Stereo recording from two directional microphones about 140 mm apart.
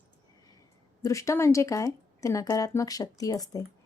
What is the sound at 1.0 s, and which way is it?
Speech, 20° left (ahead or behind).